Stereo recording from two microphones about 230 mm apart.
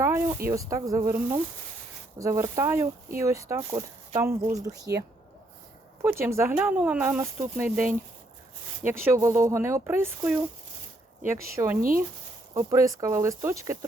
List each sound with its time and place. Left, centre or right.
0.0 s a sound: centre
0.4 s speech: centre
11.5 s speech: centre
11.8 s speech: right
12.5 s speech: centre